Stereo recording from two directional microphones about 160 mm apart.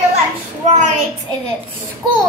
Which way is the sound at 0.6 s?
45° right (ahead or behind).